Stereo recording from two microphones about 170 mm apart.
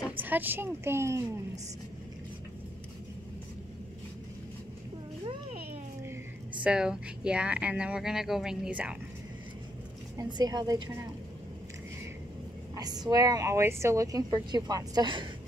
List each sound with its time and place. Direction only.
0.2 s speech: 10° right (ahead or behind)
6.6 s speech: 5° right (ahead or behind)
10.1 s a woman's voice: 25° right (ahead or behind)
12.7 s a woman's voice: 25° right (ahead or behind)